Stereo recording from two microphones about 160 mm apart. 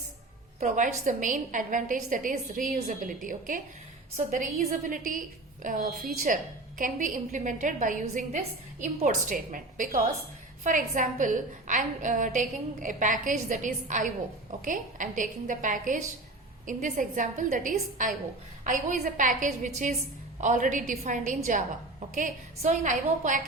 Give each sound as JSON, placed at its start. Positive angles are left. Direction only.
{"t": 0.6, "sound": "a woman's voice", "side_deg": -50}
{"t": 4.9, "sound": "a woman's voice", "side_deg": -55}